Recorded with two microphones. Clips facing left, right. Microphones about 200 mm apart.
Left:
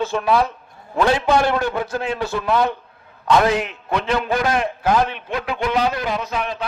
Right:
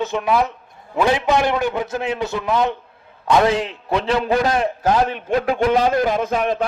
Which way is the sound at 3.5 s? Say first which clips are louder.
Right 1 dB; 30° right (ahead or behind).